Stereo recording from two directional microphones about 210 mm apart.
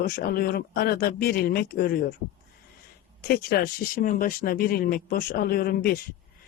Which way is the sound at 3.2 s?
45° left (ahead or behind).